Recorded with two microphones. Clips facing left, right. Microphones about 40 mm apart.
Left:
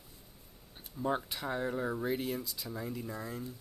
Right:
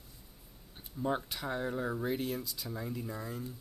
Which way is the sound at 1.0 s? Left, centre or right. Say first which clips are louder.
Even; centre.